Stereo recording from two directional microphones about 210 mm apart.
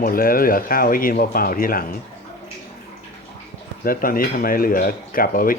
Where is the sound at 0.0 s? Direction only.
45° left (ahead or behind).